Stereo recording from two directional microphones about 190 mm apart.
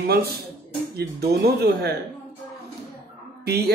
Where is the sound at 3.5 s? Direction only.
60° right (ahead or behind).